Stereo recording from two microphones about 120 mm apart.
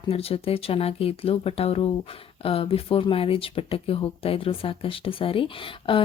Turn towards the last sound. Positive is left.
turn(degrees=45)  # may be behind; listen again after turning